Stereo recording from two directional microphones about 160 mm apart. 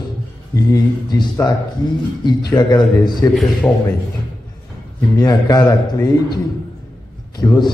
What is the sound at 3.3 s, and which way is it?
Speech, centre (ahead or behind).